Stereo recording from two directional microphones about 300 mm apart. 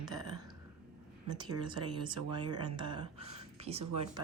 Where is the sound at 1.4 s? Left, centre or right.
Centre.